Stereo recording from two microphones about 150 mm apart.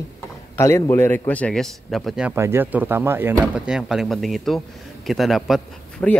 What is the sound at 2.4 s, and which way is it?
Speech, 15° right (ahead or behind).